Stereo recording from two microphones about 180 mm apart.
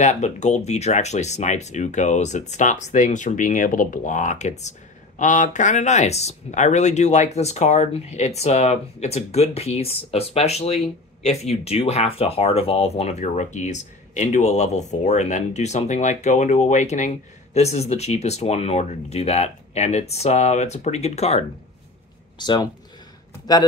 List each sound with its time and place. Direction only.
0.0 s speech: 40° left (ahead or behind)
22.4 s speech: 25° left (ahead or behind)